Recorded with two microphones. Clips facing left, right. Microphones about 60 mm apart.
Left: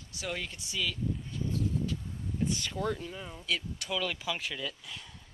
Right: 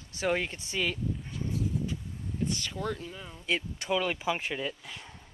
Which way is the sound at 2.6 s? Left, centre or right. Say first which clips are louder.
Left 1 dB; centre.